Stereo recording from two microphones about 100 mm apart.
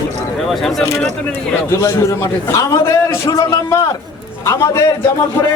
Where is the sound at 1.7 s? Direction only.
30° left (ahead or behind).